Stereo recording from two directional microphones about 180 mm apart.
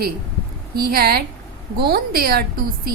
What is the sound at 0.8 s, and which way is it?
A woman's voice, 55° right (ahead or behind).